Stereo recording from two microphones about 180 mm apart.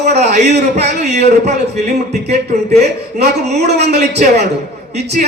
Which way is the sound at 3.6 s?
40° right (ahead or behind).